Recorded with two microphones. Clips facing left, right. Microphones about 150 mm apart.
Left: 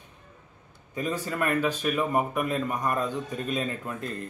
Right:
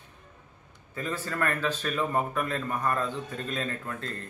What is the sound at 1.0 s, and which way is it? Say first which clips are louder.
Speech: left 2 dB; 15° left (ahead or behind).